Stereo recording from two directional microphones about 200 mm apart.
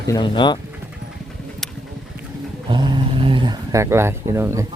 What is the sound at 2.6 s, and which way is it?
Speech, 20° right (ahead or behind).